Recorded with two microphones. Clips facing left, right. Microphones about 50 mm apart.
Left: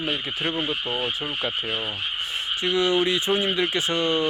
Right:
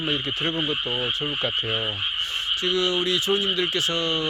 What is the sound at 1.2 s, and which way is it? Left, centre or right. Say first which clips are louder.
Speech: right 1 dB; centre.